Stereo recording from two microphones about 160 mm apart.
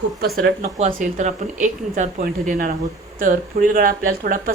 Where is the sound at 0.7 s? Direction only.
45° right (ahead or behind).